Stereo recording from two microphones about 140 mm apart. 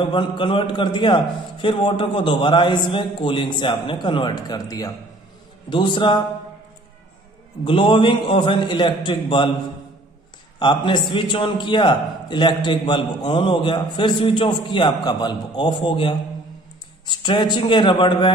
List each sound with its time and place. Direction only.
0.1 s a man's voice: 35° left (ahead or behind)
7.6 s a man's voice: 35° left (ahead or behind)
10.6 s a man's voice: 35° left (ahead or behind)